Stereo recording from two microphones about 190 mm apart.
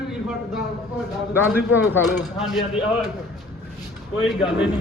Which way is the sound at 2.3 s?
Centre (ahead or behind).